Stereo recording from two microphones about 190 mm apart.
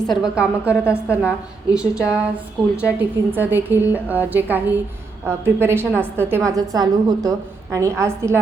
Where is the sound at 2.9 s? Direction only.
10° right (ahead or behind).